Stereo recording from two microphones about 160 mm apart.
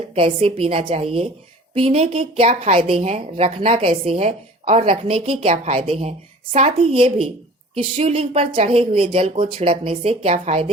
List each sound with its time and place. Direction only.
0.1 s a woman's voice: 35° right (ahead or behind)